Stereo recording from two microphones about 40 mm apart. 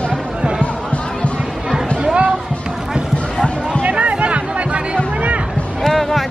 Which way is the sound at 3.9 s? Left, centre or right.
Right.